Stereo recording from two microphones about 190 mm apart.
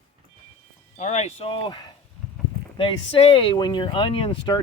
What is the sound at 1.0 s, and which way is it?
Speech, 35° left (ahead or behind).